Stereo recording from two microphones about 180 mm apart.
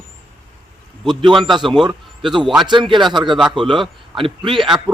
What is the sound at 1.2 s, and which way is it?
Speech, 25° right (ahead or behind).